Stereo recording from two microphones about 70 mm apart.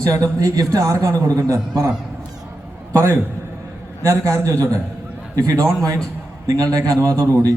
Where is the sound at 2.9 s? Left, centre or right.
Right.